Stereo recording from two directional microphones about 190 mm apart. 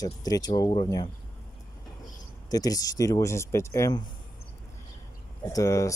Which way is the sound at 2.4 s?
20° left (ahead or behind).